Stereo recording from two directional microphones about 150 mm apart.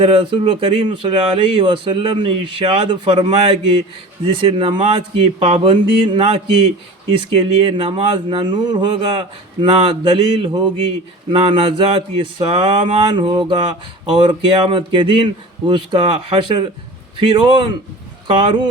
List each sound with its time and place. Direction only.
0.0 s speech: 35° right (ahead or behind)